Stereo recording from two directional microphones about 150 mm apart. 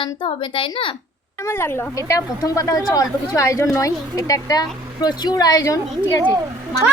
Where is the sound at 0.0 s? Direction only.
35° left (ahead or behind).